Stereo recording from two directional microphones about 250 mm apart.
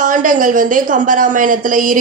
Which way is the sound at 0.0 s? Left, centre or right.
Right.